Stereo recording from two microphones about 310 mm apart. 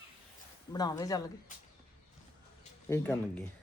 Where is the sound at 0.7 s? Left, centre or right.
Centre.